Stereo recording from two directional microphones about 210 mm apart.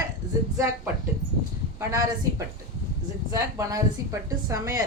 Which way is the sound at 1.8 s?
15° right (ahead or behind).